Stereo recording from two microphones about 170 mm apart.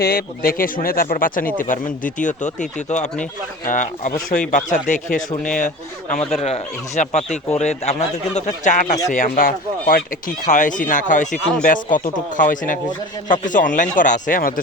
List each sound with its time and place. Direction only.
0.0 s speech: 65° left (ahead or behind)